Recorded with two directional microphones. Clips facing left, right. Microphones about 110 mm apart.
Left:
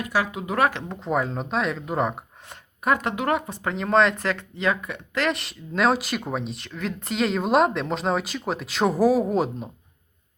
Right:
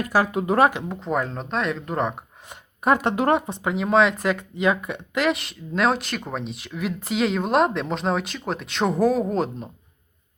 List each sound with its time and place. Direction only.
0.0 s speech: 45° right (ahead or behind)
0.9 s speech: centre (ahead or behind)
2.8 s a woman's voice: 30° right (ahead or behind)
3.6 s speech: 10° right (ahead or behind)
5.3 s speech: centre (ahead or behind)